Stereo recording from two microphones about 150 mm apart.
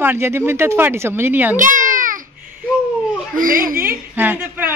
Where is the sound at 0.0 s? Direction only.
15° right (ahead or behind).